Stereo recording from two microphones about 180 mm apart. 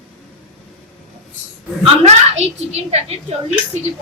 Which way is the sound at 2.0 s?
35° right (ahead or behind).